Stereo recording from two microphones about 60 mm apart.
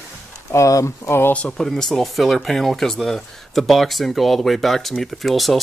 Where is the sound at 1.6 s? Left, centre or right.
Centre.